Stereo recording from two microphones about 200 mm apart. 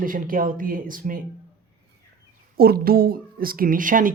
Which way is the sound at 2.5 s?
50° right (ahead or behind).